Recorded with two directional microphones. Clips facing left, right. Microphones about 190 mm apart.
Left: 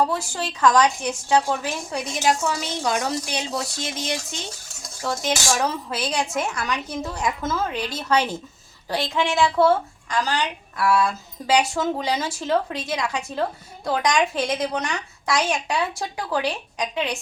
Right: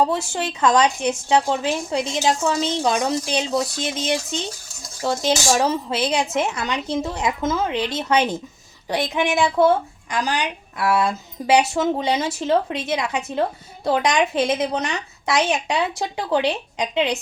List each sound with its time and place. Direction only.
0.0 s a woman's voice: 20° right (ahead or behind)